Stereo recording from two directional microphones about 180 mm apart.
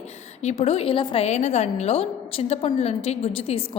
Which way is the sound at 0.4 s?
35° left (ahead or behind).